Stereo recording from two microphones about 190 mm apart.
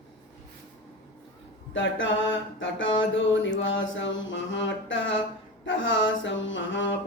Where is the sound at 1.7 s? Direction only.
80° left.